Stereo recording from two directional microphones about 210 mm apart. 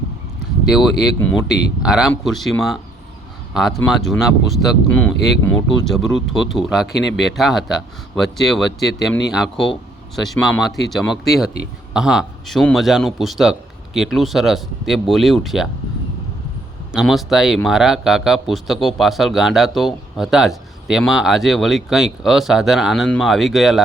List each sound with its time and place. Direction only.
0.7 s a man's voice: centre (ahead or behind)
1.2 s speech: 50° left (ahead or behind)
1.8 s a man's voice: 5° right (ahead or behind)
5.8 s a man's voice: centre (ahead or behind)
16.9 s a man's voice: centre (ahead or behind)